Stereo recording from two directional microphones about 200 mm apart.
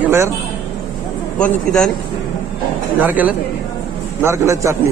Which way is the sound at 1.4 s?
5° left (ahead or behind).